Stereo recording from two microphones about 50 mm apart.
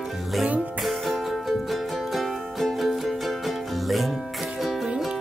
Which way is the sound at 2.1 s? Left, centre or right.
Centre.